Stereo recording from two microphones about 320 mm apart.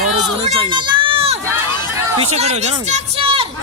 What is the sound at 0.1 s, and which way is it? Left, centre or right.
Crowd, centre.